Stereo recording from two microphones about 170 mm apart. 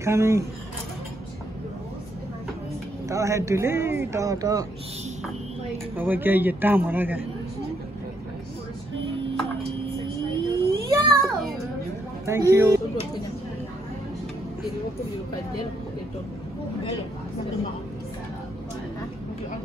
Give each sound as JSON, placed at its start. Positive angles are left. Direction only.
{"t": 0.0, "sound": "speech", "side_deg": -15}
{"t": 3.1, "sound": "speech", "side_deg": -15}
{"t": 5.9, "sound": "speech", "side_deg": -10}
{"t": 10.3, "sound": "a sound", "side_deg": -25}
{"t": 12.3, "sound": "speech", "side_deg": -15}